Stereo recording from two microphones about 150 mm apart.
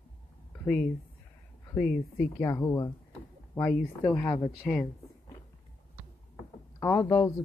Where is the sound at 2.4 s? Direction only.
20° left (ahead or behind).